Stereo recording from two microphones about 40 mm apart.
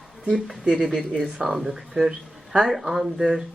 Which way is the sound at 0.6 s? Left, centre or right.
Centre.